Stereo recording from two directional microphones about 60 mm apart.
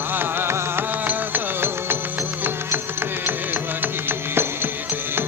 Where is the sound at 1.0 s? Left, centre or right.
Right.